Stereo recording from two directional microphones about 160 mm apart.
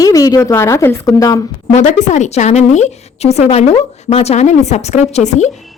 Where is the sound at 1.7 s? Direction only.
45° left (ahead or behind).